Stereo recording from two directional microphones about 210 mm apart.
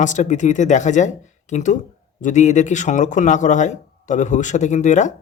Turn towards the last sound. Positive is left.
turn(degrees=35)  # may be behind; listen again after turning